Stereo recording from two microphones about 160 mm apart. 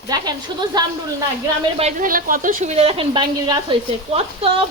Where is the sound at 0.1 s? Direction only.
25° right (ahead or behind).